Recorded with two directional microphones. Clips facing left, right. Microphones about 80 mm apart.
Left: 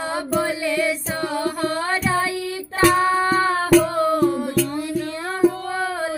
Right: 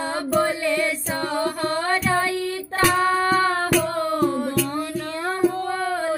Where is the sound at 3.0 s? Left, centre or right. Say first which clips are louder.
Left 1 dB; centre.